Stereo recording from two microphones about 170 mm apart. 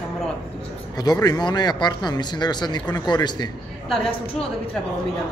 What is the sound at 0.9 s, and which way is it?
A man's voice, 25° left (ahead or behind).